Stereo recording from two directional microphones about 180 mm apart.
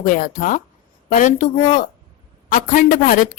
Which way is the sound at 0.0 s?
50° left (ahead or behind).